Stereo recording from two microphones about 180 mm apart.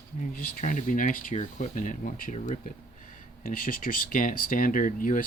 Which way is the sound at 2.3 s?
35° left (ahead or behind).